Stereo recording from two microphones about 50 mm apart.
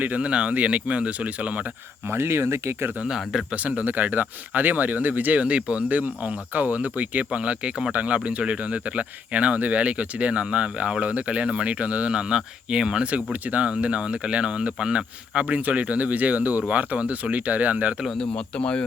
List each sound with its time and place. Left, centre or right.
0.0 s speech: right
2.0 s speech: right
3.5 s speech: right
5.4 s speech: right
18.2 s speech: left